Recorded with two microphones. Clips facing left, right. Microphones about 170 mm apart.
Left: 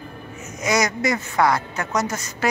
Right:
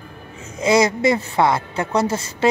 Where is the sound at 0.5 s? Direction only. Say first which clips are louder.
Right 6 dB; 30° right (ahead or behind).